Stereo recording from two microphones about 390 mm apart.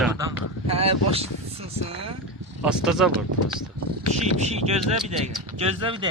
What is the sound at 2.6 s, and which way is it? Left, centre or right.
Speech, centre.